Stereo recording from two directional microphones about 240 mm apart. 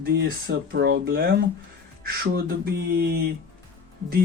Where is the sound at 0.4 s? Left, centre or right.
Right.